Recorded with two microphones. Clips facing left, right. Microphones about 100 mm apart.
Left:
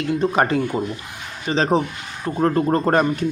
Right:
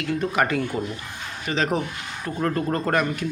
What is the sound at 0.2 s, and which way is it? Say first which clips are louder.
A man's voice: left 4 dB; 30° left (ahead or behind).